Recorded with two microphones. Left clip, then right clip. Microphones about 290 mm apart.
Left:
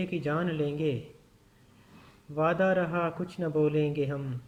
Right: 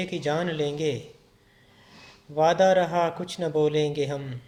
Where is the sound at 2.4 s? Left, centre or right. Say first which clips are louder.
Right 7 dB; right.